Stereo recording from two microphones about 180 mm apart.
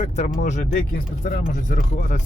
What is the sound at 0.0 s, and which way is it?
Speech, 40° left (ahead or behind).